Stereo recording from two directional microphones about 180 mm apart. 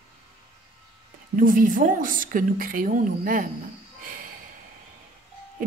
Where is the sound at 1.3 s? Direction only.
50° right (ahead or behind).